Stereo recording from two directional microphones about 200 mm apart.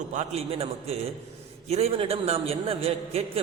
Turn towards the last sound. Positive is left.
turn(degrees=-30)  # may be behind; listen again after turning